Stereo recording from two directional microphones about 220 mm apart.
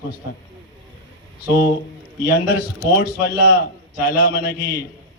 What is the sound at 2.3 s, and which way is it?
A man's voice, 45° left (ahead or behind).